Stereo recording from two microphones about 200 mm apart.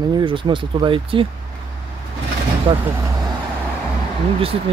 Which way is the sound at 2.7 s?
20° right (ahead or behind).